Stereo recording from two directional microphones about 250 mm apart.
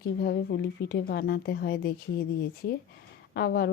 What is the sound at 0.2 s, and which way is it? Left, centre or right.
Speech, left.